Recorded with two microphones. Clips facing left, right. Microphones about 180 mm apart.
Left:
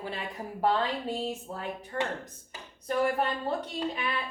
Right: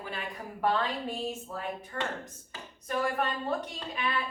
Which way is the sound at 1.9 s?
25° left (ahead or behind).